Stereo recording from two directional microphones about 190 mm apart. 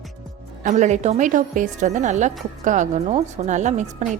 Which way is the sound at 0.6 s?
40° right (ahead or behind).